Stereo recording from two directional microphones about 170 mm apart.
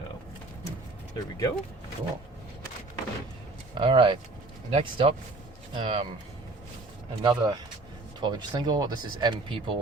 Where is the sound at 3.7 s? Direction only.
30° right (ahead or behind).